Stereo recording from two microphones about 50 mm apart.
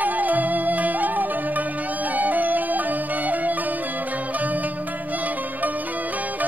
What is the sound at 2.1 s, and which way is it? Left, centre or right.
Music, right.